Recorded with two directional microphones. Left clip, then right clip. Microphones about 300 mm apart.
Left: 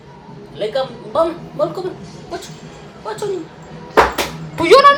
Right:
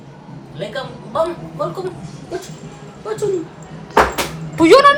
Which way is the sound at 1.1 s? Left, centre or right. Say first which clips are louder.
Left 2 dB; left.